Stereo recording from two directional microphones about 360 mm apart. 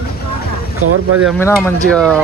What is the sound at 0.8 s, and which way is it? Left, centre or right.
Speech, right.